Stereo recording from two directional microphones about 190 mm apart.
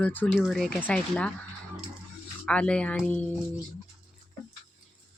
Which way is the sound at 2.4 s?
5° left (ahead or behind).